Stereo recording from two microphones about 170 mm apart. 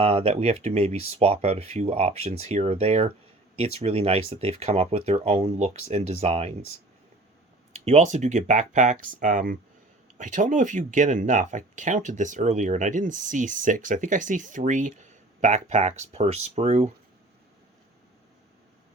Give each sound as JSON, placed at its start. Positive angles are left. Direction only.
{"t": 0.0, "sound": "speech", "side_deg": -35}
{"t": 7.7, "sound": "speech", "side_deg": -40}